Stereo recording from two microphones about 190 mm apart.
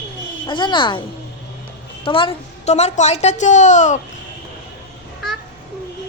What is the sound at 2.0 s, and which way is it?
A woman's voice, 30° left (ahead or behind).